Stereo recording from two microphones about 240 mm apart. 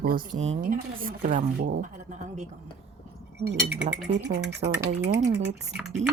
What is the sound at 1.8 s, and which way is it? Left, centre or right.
Speech, right.